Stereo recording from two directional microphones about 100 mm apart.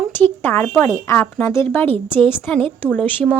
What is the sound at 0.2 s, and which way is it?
A woman's voice, 20° left (ahead or behind).